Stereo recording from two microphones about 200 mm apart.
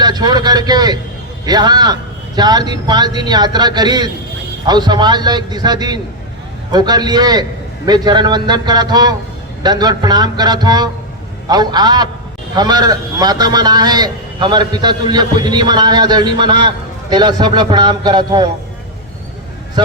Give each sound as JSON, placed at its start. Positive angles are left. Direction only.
{"t": 0.0, "sound": "a man's voice", "side_deg": -20}